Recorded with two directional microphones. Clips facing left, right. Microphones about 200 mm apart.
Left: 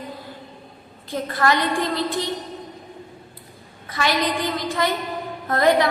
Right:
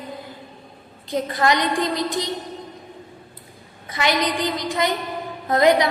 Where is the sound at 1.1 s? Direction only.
20° right (ahead or behind).